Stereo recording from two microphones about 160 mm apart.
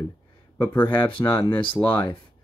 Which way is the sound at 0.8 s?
30° left (ahead or behind).